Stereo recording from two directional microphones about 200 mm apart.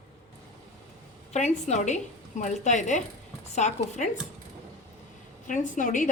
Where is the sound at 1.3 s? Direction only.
35° left (ahead or behind).